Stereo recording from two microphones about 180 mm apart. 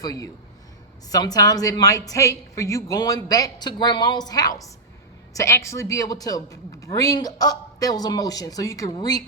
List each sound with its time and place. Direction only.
0.0 s a man's voice: 20° left (ahead or behind)